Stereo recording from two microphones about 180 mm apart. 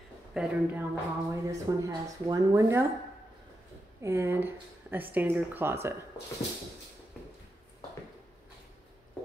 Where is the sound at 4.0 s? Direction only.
15° right (ahead or behind).